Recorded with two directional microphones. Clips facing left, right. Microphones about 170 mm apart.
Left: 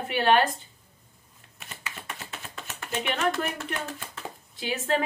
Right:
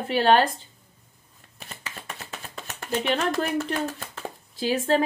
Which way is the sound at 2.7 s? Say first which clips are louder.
Right 5 dB; 35° right (ahead or behind).